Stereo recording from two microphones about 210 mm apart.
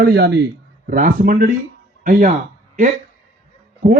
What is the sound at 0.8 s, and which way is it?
Speech, 40° right (ahead or behind).